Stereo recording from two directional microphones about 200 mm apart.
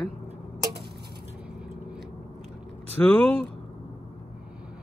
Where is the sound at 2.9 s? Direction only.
10° left (ahead or behind).